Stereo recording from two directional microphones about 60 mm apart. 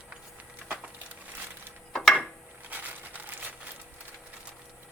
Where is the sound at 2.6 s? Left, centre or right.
Right.